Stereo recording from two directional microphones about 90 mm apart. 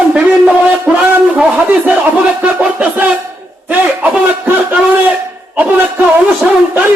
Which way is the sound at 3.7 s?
20° right (ahead or behind).